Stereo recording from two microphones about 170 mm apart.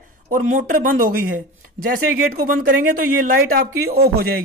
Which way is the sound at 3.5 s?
65° right (ahead or behind).